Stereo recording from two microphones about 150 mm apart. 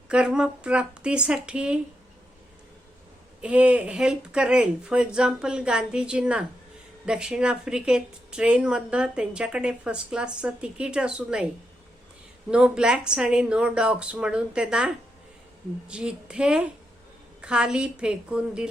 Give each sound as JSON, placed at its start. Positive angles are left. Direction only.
{"t": 0.1, "sound": "a woman's voice", "side_deg": -5}
{"t": 3.4, "sound": "a woman's voice", "side_deg": -10}
{"t": 12.5, "sound": "a woman's voice", "side_deg": -5}